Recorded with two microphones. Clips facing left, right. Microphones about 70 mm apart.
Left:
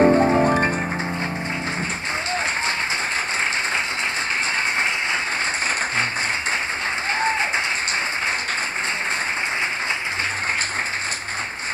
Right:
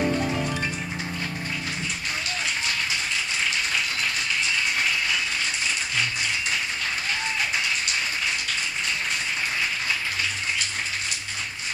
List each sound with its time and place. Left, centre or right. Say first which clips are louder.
0.0 s music: left 10 dB; left